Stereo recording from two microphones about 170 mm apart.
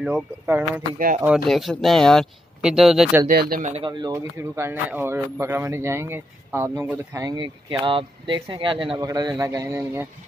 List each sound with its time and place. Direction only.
0.0 s speech: 10° right (ahead or behind)
0.9 s speech: 55° right (ahead or behind)
1.2 s speech: centre (ahead or behind)
3.3 s speech: 60° right (ahead or behind)
3.7 s speech: 25° right (ahead or behind)
7.8 s speech: 30° right (ahead or behind)